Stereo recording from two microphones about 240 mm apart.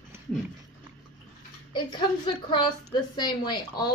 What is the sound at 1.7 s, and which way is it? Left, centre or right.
A woman's voice, centre.